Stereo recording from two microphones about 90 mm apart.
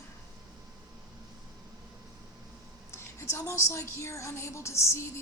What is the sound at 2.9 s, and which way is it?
Speech, 30° left (ahead or behind).